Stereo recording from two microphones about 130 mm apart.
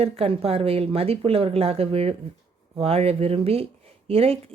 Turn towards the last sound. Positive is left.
turn(degrees=-50)  # may be behind; listen again after turning